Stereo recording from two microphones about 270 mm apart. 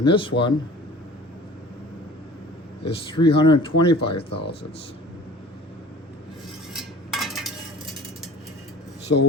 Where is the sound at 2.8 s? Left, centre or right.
Centre.